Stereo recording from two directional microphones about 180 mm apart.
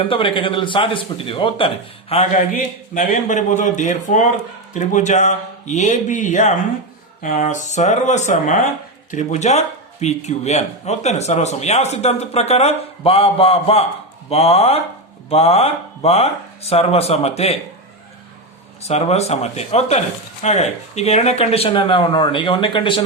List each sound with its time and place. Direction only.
0.0 s speech: 30° left (ahead or behind)
2.9 s speech: 50° left (ahead or behind)
18.8 s speech: 35° left (ahead or behind)